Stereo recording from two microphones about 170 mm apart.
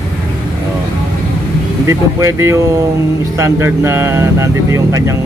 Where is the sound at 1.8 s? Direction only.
15° right (ahead or behind).